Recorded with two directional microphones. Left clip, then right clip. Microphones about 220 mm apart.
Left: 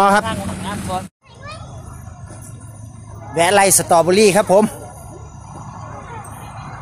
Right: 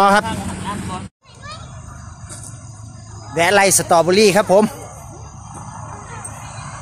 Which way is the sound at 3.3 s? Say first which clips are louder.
Even; centre (ahead or behind).